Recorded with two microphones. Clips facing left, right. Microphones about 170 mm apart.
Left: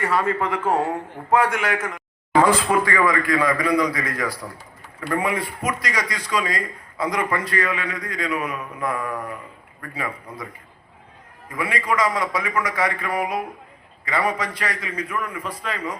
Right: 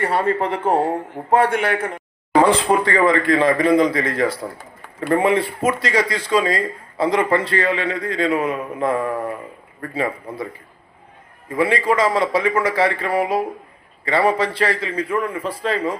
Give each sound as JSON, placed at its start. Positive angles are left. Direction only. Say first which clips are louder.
{"t": 0.0, "sound": "speech", "louder": "right 3 dB", "side_deg": -30}